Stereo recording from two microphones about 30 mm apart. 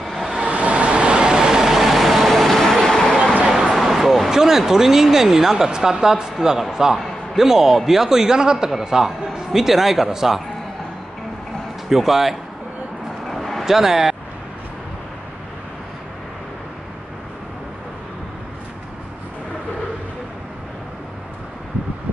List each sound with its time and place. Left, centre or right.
0.0 s vehicle: centre
0.5 s vehicle: right
1.5 s vehicle: centre
2.8 s a sound: centre
3.4 s a sound: centre
3.8 s vehicle: centre
4.3 s a man's voice: centre
11.9 s speech: centre
13.3 s vehicle: centre
13.7 s speech: centre